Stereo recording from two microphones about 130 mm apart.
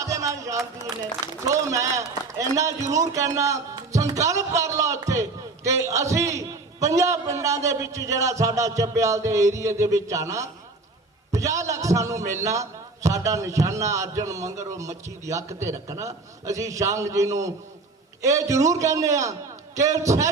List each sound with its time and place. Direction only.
0.0 s music: 25° right (ahead or behind)
1.0 s a man's voice: 25° right (ahead or behind)